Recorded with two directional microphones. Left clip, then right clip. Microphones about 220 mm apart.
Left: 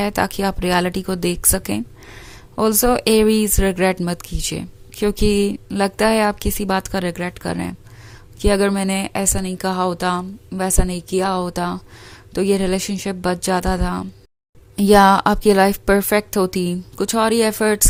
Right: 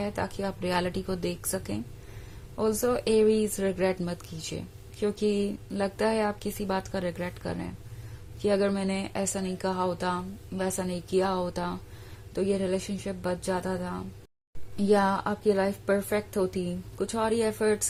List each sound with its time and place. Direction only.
0.0 s a woman's voice: 40° left (ahead or behind)